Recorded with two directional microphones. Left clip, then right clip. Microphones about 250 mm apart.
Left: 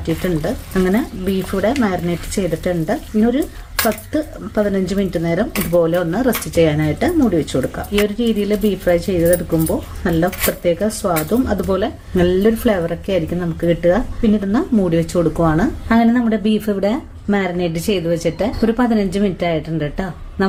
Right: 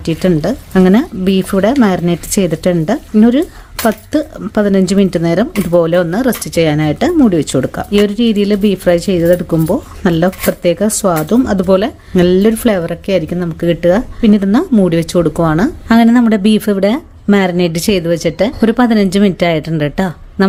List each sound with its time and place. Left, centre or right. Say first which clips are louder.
0.0 s speech: right 6 dB; right